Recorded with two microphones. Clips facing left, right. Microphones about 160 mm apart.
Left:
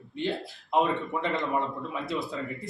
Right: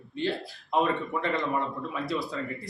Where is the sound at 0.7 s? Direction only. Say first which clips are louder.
Even; 20° left (ahead or behind).